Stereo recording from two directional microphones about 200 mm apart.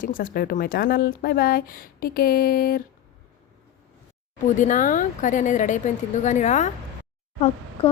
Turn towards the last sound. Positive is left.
turn(degrees=35)  # may be behind; listen again after turning